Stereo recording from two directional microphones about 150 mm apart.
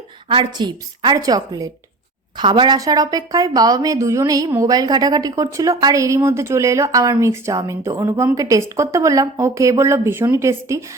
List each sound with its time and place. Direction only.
0.3 s speech: 30° right (ahead or behind)